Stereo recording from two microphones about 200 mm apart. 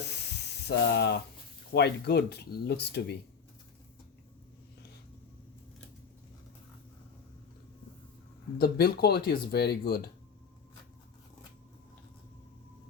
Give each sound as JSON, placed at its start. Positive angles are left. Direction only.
{"t": 0.7, "sound": "speech", "side_deg": 55}
{"t": 8.5, "sound": "speech", "side_deg": 50}